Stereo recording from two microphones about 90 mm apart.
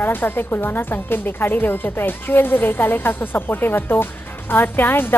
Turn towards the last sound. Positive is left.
turn(degrees=25)  # may be behind; listen again after turning